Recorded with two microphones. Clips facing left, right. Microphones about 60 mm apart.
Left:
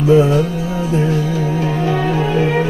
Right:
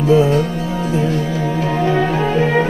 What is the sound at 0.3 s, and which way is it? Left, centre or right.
Music, right.